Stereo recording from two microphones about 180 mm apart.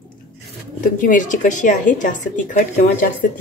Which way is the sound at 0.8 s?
45° left (ahead or behind).